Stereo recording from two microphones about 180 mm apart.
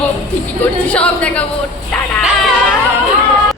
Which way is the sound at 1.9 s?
5° left (ahead or behind).